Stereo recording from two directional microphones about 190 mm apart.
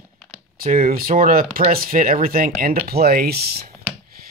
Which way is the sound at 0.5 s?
50° right (ahead or behind).